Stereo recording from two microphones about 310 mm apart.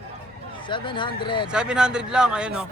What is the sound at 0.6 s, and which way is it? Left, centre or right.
Speech, centre.